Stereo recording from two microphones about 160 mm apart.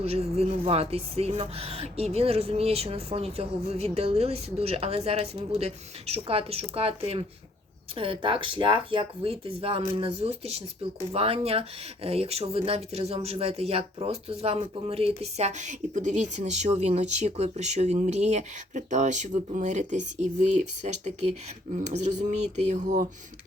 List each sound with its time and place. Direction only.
0.0 s speech: 40° right (ahead or behind)